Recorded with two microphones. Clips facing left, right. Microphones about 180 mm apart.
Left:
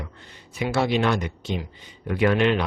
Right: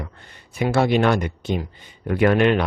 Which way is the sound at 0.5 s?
50° right (ahead or behind).